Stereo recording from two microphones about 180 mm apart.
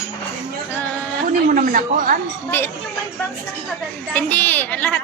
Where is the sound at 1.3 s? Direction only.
50° right (ahead or behind).